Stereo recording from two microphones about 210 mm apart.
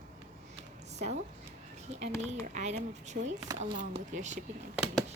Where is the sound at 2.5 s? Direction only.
35° right (ahead or behind).